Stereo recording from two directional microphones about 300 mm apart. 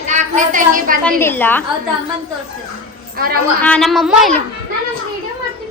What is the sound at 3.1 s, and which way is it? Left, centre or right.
Speech, right.